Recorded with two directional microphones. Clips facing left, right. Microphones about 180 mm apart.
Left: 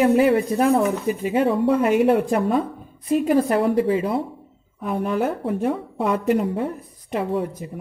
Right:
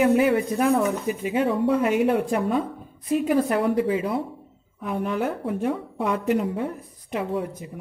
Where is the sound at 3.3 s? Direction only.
35° left (ahead or behind).